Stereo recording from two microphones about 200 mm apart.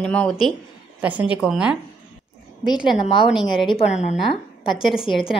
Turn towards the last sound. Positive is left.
turn(degrees=-5)  # may be behind; listen again after turning